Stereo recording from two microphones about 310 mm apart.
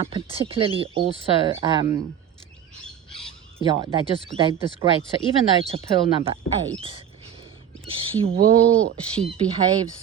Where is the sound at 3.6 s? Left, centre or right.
Centre.